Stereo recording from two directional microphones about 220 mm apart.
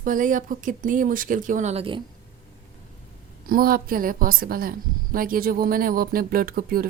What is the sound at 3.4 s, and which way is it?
Speech, 40° right (ahead or behind).